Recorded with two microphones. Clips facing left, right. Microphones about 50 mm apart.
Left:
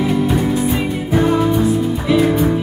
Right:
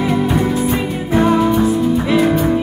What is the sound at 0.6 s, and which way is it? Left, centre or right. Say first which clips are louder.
Music: even; centre.